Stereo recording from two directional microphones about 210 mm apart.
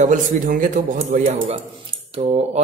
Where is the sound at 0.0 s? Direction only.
40° right (ahead or behind).